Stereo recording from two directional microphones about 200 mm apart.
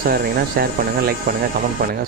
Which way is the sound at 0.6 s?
50° right (ahead or behind).